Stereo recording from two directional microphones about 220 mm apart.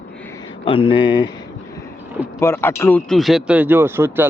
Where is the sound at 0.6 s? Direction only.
25° left (ahead or behind).